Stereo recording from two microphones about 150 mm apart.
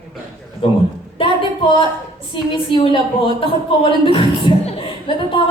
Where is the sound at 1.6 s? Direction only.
35° left (ahead or behind).